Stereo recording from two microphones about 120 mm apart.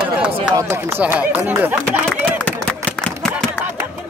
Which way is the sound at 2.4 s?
10° left (ahead or behind).